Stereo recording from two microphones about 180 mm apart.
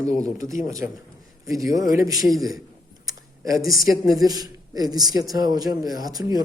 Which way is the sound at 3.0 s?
15° right (ahead or behind).